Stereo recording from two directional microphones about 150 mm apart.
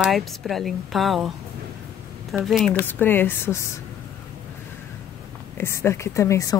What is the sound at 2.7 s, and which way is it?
Speech, 15° left (ahead or behind).